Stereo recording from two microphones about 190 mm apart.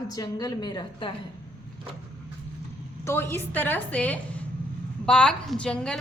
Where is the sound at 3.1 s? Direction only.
15° left (ahead or behind).